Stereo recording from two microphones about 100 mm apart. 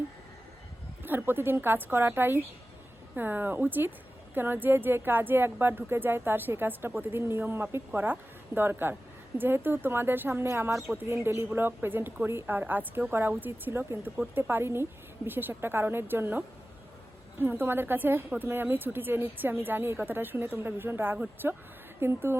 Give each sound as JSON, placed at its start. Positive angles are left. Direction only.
{"t": 1.0, "sound": "speech", "side_deg": -20}
{"t": 17.4, "sound": "speech", "side_deg": -20}